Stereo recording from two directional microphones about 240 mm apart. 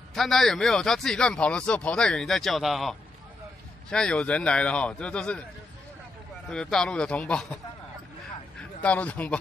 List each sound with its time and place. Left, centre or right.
0.1 s speech: centre
6.5 s speech: centre
8.8 s speech: centre